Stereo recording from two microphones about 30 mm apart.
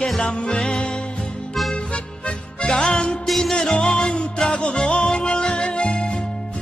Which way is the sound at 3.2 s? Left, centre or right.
Centre.